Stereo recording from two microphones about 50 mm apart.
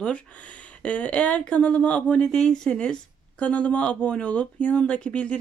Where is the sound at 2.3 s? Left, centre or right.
Centre.